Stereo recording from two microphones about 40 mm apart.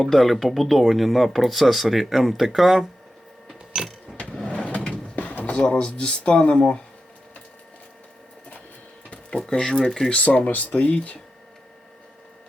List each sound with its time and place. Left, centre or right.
0.0 s speech: centre
3.7 s a sound: right
4.1 s vehicle: centre
4.4 s a sound: left
5.1 s a sound: left
5.5 s speech: left
9.4 s speech: centre
10.1 s speech: left
10.7 s speech: left